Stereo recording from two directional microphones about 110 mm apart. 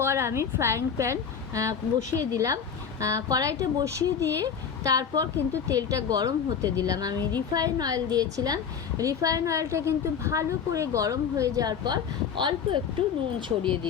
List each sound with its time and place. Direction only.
0.0 s a woman's voice: 25° right (ahead or behind); by 12.8 s 45° right (ahead or behind)